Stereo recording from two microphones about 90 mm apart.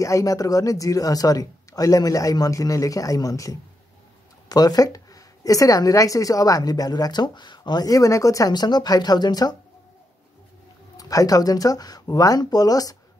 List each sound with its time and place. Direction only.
0.0 s a woman's voice: 35° left (ahead or behind)
11.0 s a woman's voice: 40° left (ahead or behind)